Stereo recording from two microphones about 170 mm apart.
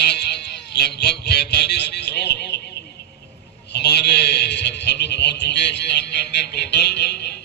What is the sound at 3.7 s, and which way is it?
A man's voice, 80° left.